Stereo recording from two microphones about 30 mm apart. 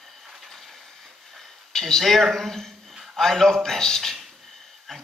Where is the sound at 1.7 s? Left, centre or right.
Centre.